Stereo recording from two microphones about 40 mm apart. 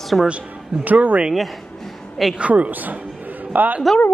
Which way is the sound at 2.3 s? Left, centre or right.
Right.